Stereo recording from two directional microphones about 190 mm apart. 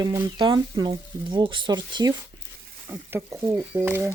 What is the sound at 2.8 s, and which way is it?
Speech, 10° right (ahead or behind).